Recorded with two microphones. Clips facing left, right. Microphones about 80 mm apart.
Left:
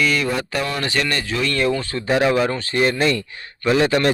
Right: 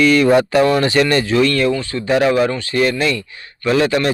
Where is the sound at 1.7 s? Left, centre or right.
Left.